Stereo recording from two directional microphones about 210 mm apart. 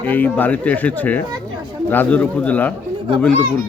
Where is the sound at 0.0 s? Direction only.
10° left (ahead or behind).